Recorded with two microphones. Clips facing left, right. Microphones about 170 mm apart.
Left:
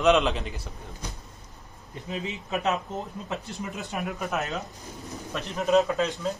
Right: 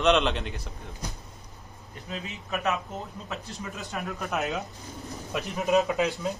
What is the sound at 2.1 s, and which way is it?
Speech, 20° left (ahead or behind).